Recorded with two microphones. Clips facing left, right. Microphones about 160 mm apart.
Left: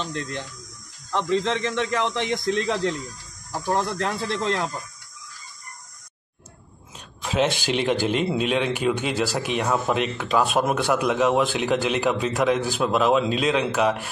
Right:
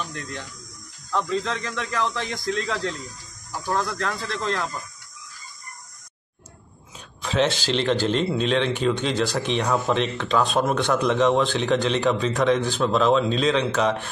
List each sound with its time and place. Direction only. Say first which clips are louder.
0.0 s a man's voice: left 3 dB; 25° left (ahead or behind)
7.2 s speech: even; 10° left (ahead or behind)